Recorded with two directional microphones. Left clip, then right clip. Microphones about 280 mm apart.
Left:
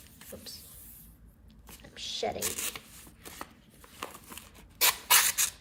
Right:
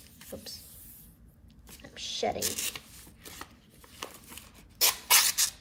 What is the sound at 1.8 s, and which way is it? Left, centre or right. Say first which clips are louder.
Shuffling cards: right 2 dB; centre.